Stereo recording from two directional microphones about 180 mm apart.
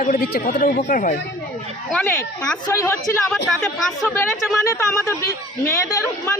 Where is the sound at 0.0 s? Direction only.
50° left (ahead or behind).